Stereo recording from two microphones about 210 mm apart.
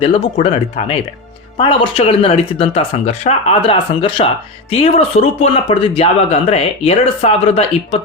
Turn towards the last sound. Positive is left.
turn(degrees=30)  # may be behind; listen again after turning